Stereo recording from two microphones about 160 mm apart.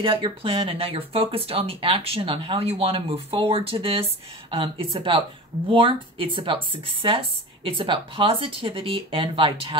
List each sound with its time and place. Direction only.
0.0 s speech: 35° right (ahead or behind)